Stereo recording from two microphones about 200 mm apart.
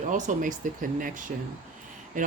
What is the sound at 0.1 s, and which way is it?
Speech, 40° right (ahead or behind).